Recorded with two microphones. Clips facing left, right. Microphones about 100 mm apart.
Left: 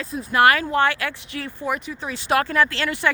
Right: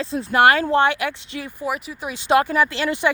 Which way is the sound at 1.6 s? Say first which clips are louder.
Even; 5° right (ahead or behind).